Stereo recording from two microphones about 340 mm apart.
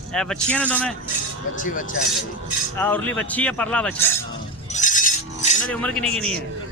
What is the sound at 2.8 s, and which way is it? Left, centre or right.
Speech, centre.